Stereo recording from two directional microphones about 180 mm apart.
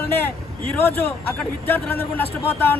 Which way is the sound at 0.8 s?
10° left (ahead or behind).